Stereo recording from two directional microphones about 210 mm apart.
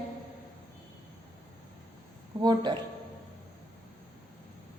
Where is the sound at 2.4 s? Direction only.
20° right (ahead or behind).